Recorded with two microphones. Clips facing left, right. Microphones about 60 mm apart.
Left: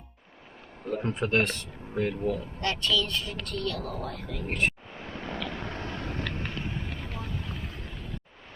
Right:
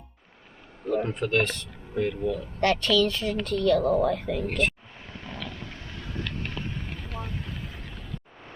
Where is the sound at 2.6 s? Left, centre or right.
Right.